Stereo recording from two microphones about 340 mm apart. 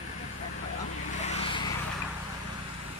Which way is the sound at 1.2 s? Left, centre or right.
Centre.